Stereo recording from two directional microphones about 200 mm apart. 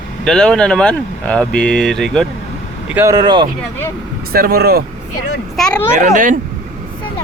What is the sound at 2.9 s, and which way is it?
Speech, 15° right (ahead or behind).